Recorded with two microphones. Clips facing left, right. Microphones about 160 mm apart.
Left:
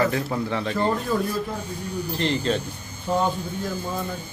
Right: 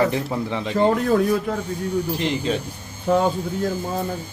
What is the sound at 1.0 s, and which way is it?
Speech, 65° right (ahead or behind).